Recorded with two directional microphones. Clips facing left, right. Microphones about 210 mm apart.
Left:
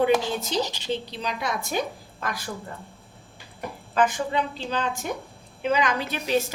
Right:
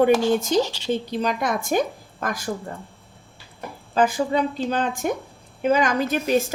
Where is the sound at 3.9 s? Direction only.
35° right (ahead or behind).